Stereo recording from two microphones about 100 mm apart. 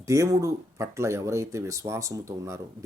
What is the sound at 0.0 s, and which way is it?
Speech, 30° right (ahead or behind).